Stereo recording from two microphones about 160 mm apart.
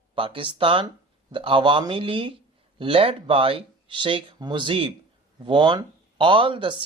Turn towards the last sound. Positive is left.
turn(degrees=-30)  # may be behind; listen again after turning